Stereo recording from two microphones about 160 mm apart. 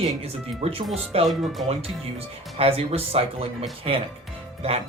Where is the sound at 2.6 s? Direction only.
40° right (ahead or behind).